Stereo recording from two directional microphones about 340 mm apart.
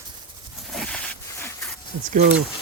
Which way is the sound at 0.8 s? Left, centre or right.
Centre.